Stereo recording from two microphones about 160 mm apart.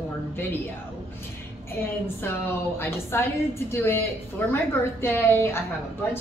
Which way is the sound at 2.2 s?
15° left (ahead or behind).